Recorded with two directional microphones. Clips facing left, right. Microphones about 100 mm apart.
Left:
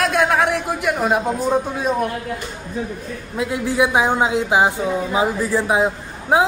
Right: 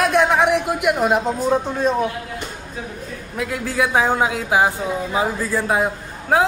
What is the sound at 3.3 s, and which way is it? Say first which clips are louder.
A man's voice: left 3 dB; 20° left (ahead or behind).